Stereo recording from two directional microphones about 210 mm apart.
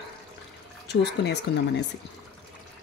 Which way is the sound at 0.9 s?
55° left (ahead or behind).